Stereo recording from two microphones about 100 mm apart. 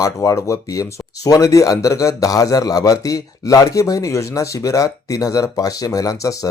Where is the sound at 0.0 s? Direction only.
35° left (ahead or behind).